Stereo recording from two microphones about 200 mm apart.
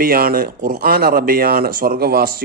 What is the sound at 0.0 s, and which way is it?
A man's voice, 50° right (ahead or behind).